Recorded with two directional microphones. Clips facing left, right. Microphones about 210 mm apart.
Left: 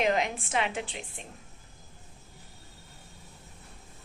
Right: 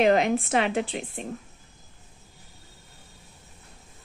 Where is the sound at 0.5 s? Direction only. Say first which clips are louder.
Right 7 dB; 40° right (ahead or behind).